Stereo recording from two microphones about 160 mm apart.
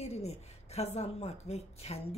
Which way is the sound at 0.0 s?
40° left (ahead or behind).